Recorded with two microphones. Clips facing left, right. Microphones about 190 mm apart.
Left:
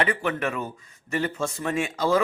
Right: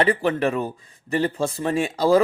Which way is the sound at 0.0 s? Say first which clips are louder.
Right 5 dB; 35° right (ahead or behind).